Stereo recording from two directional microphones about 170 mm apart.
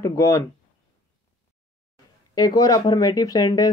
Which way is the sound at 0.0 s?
15° left (ahead or behind).